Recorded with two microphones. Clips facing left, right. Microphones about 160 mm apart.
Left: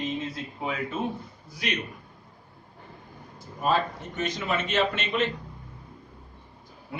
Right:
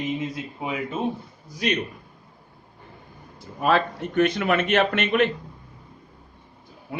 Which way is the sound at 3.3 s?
70° right (ahead or behind).